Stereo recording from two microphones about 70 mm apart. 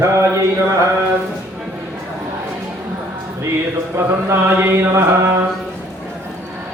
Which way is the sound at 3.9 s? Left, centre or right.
Right.